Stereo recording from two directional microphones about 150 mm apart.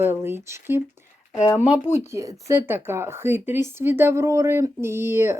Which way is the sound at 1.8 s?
50° left (ahead or behind).